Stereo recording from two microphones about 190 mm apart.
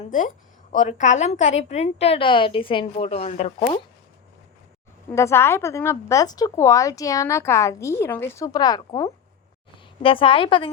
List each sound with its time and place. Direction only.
0.7 s a woman's voice: 40° left (ahead or behind)
5.1 s speech: 15° left (ahead or behind)